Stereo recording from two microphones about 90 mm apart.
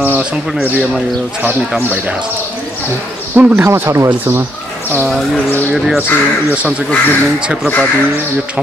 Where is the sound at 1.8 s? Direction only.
20° right (ahead or behind).